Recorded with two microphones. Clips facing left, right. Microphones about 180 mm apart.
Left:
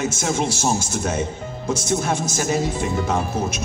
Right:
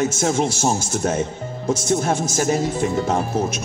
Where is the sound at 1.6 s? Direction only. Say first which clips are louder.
Right 2 dB; 50° right (ahead or behind).